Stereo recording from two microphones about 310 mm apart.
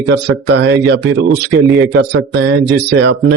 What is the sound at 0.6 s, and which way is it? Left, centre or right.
Speech, right.